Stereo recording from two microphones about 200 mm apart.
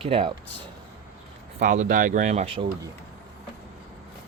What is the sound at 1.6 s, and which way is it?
Speech, 40° right (ahead or behind).